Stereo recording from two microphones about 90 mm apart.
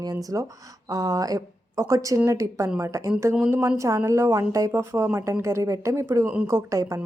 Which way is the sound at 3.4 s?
25° right (ahead or behind).